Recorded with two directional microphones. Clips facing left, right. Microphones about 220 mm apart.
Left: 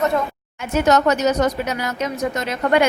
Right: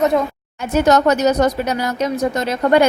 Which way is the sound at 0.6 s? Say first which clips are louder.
Right 3 dB; 35° right (ahead or behind).